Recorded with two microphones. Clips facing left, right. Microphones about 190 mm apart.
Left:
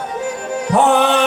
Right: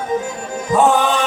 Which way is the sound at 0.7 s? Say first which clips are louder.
Left 1 dB; 65° left (ahead or behind).